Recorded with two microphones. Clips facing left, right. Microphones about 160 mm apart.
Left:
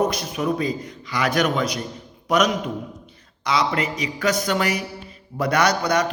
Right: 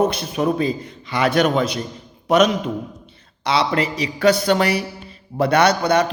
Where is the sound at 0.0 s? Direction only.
30° right (ahead or behind).